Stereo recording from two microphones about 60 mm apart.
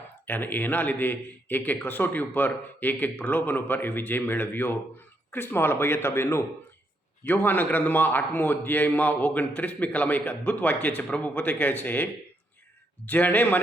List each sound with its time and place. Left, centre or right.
0.3 s a man's voice: left
7.4 s a man's voice: left
13.1 s a man's voice: left